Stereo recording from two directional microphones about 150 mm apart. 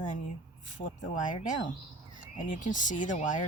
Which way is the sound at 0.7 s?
60° left (ahead or behind).